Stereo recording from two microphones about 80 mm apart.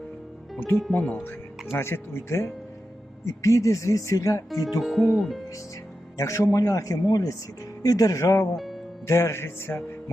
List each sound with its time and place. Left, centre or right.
0.9 s speech: centre
1.7 s speech: left
4.8 s speech: centre
6.1 s a man's voice: left
8.5 s speech: centre
9.0 s speech: left